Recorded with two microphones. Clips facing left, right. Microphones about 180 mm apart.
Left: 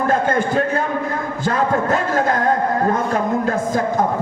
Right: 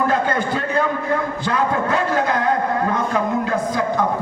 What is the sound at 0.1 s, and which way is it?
Speech, 45° left (ahead or behind).